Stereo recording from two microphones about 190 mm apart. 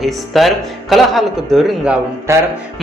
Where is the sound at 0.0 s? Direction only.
Centre (ahead or behind).